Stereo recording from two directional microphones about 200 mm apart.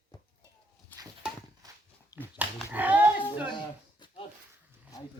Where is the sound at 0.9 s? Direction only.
10° left (ahead or behind).